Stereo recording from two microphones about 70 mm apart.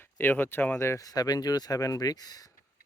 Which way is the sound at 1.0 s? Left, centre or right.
Left.